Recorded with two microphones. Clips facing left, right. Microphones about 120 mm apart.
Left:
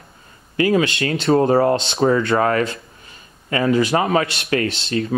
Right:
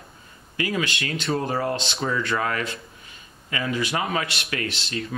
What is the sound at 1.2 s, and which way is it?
Speech, 60° left (ahead or behind).